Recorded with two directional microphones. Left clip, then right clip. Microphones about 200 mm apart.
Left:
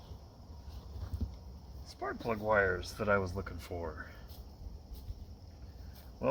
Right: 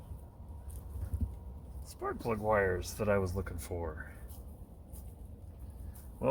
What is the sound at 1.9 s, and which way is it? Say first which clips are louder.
Speech: right 1 dB; 25° right (ahead or behind).